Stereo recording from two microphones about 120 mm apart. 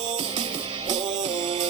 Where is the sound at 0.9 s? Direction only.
40° right (ahead or behind).